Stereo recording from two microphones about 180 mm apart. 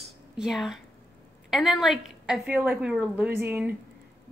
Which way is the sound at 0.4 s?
Centre (ahead or behind).